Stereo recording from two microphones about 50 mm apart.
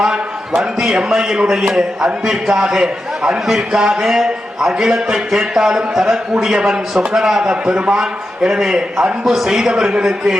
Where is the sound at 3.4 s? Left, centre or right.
Centre.